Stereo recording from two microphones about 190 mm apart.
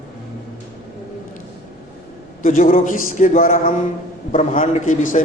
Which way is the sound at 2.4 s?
45° left (ahead or behind).